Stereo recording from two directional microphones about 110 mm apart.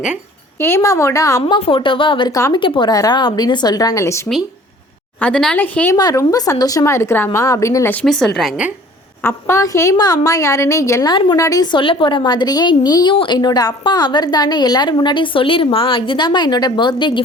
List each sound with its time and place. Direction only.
0.6 s a woman's voice: 25° left (ahead or behind)
1.5 s a woman's voice: 55° left (ahead or behind)
2.3 s speech: 35° left (ahead or behind)
2.6 s speech: 50° left (ahead or behind); by 4.3 s 25° left (ahead or behind)
5.2 s a woman's voice: 5° left (ahead or behind)
5.9 s a woman's voice: 30° left (ahead or behind)
8.0 s a woman's voice: 5° left (ahead or behind)
9.2 s a woman's voice: 30° left (ahead or behind); by 17.2 s 45° left (ahead or behind)